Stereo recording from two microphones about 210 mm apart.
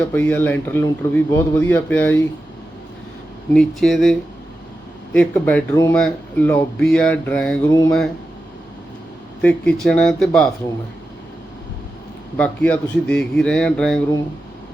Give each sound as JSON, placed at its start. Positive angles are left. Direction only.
{"t": 0.0, "sound": "speech", "side_deg": 10}
{"t": 3.5, "sound": "speech", "side_deg": 0}
{"t": 7.7, "sound": "speech", "side_deg": 15}
{"t": 9.4, "sound": "speech", "side_deg": 5}
{"t": 12.4, "sound": "speech", "side_deg": 5}